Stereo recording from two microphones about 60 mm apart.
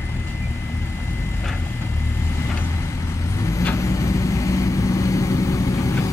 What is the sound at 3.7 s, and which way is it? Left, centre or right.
Vehicle, left.